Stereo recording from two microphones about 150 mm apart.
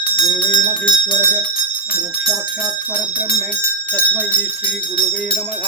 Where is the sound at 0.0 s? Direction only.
35° left (ahead or behind).